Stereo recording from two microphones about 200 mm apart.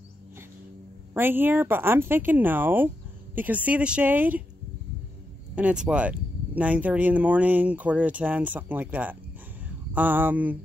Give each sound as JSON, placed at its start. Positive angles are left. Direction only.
{"t": 1.1, "sound": "speech", "side_deg": -10}
{"t": 5.6, "sound": "speech", "side_deg": -5}